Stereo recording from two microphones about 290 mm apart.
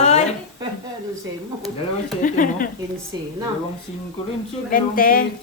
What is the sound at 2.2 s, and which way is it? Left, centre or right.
Speech, left.